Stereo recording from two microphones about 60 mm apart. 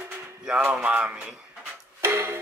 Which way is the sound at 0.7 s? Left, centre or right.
Centre.